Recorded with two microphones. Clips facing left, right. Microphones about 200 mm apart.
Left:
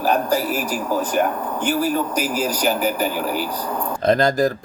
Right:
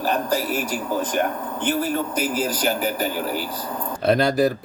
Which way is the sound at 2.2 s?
40° left (ahead or behind).